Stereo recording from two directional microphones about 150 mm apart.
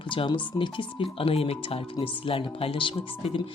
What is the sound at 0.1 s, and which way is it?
Speech, 35° left (ahead or behind).